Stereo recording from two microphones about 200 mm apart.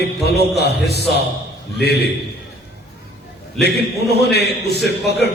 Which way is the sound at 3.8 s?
55° left (ahead or behind).